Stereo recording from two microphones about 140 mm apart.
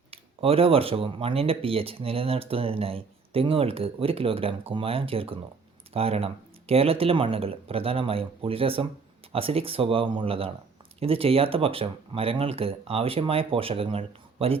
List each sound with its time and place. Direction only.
0.1 s speech: 45° right (ahead or behind)